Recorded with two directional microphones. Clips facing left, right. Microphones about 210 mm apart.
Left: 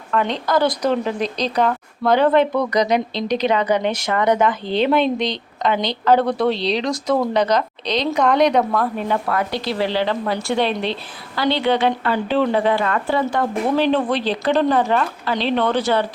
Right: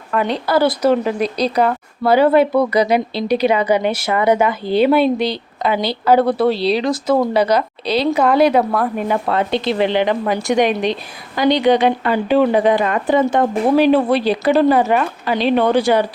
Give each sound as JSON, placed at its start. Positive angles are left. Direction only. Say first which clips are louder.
{"t": 0.1, "sound": "speech", "louder": "right 2 dB", "side_deg": -10}
{"t": 9.2, "sound": "a woman's voice", "louder": "right 4 dB", "side_deg": -25}